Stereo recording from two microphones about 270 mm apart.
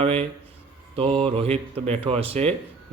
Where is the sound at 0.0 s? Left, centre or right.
Right.